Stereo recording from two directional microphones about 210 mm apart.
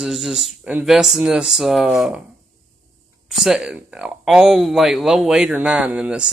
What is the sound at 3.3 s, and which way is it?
Speech, centre (ahead or behind).